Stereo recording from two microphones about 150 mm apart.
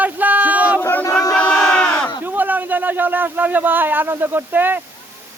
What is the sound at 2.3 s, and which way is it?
Speech, 10° right (ahead or behind).